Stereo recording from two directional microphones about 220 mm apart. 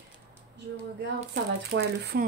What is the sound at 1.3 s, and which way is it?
Speech, 50° right (ahead or behind).